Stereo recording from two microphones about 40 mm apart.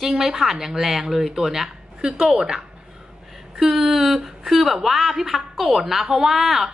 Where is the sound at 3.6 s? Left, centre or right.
Centre.